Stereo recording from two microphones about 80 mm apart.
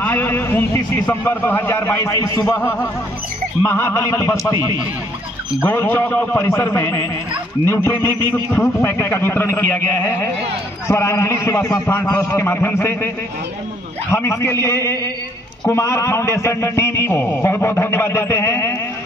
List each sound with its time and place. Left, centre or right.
0.0 s a man's voice: left
5.6 s a man's voice: left
10.9 s a man's voice: left
14.1 s a man's voice: left